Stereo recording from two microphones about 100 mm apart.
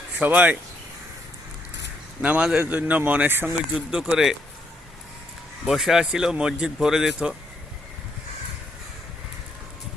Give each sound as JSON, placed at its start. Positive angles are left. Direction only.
{"t": 0.2, "sound": "speech", "side_deg": -15}
{"t": 2.2, "sound": "speech", "side_deg": -15}
{"t": 3.8, "sound": "speech", "side_deg": -10}
{"t": 5.6, "sound": "speech", "side_deg": -5}